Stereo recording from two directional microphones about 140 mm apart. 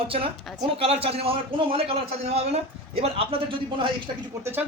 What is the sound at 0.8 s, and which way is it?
A man's voice, 45° right (ahead or behind).